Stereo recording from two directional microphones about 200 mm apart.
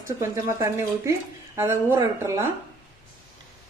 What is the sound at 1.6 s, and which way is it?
Speech, 15° right (ahead or behind).